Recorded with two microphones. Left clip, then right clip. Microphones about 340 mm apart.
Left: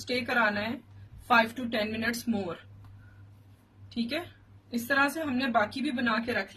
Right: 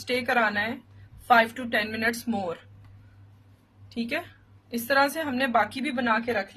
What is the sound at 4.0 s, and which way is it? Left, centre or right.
Speech, centre.